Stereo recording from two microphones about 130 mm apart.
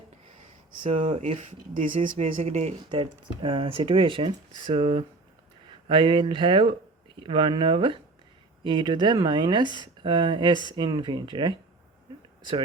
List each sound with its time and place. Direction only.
0.9 s speech: 45° right (ahead or behind)
1.2 s speech: 65° right (ahead or behind); by 1.9 s 80° right
2.0 s speech: 60° right (ahead or behind)
3.0 s speech: 40° right (ahead or behind)